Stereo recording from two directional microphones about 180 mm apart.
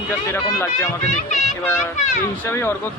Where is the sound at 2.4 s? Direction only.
15° left (ahead or behind).